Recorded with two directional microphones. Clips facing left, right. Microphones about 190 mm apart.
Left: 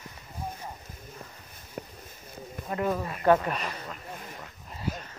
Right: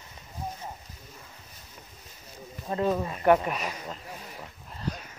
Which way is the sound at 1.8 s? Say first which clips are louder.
Left 15 dB; 60° left (ahead or behind).